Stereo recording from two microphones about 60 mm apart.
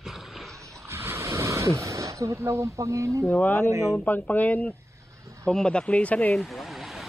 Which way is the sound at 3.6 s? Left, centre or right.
Right.